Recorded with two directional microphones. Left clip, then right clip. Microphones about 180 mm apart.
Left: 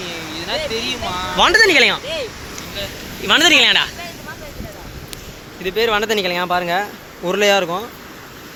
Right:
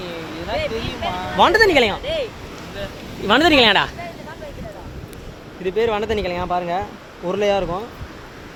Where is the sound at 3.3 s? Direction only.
35° right (ahead or behind).